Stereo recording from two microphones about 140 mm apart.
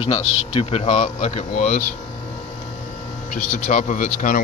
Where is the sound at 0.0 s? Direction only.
45° left (ahead or behind); by 1.8 s 65° left (ahead or behind).